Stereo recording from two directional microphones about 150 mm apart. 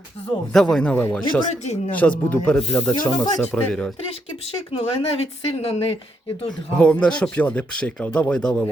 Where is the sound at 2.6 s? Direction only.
35° left (ahead or behind).